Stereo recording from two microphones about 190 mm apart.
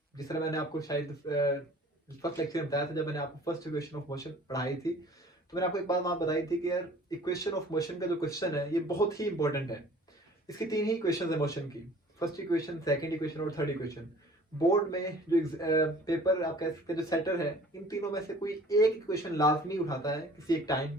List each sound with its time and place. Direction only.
0.3 s speech: 15° left (ahead or behind)
2.2 s speech: 15° left (ahead or behind)